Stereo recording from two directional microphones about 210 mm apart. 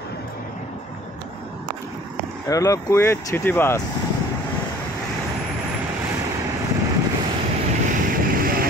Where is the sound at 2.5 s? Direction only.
15° left (ahead or behind).